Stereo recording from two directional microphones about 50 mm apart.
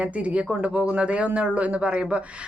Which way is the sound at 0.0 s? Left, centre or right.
Right.